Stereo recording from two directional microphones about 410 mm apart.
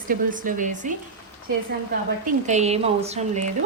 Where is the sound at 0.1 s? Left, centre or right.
Centre.